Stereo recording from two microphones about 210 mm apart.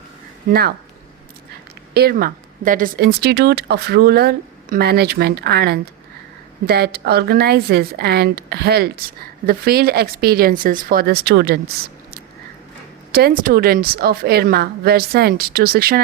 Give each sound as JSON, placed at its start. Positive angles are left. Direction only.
{"t": 1.9, "sound": "speech", "side_deg": -50}
{"t": 13.1, "sound": "speech", "side_deg": -50}